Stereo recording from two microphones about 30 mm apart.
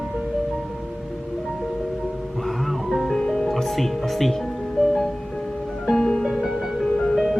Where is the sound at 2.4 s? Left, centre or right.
Centre.